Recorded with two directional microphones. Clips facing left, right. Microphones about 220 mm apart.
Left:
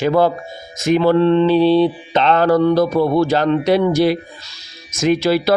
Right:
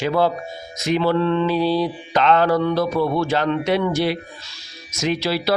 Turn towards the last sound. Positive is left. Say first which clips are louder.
# left 6 dB
turn(degrees=50)  # may be behind; listen again after turning